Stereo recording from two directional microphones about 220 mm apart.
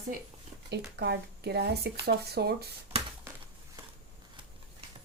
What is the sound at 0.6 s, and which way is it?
Speech, 50° right (ahead or behind).